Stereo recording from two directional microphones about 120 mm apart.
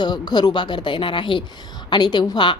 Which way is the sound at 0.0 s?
35° left (ahead or behind).